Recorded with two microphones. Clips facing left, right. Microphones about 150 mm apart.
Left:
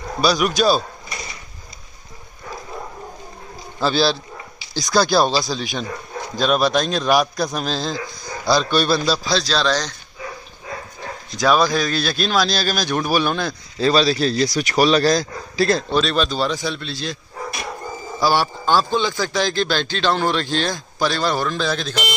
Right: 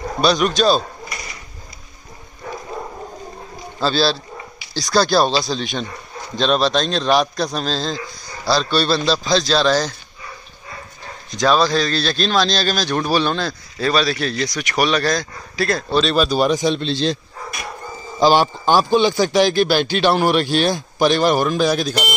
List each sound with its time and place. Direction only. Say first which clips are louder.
0.2 s speech: right 1 dB; 5° left (ahead or behind)
3.8 s a man's voice: even; 15° left (ahead or behind); by 9.9 s 5° right (ahead or behind)
11.3 s speech: right 1 dB; 10° left (ahead or behind)
13.7 s a man's voice: left 2 dB; 30° left (ahead or behind)
16.0 s a man's voice: right 2 dB; centre (ahead or behind)
16.3 s a man's voice: right 6 dB; 15° right (ahead or behind)
18.2 s a man's voice: right 5 dB; 20° right (ahead or behind)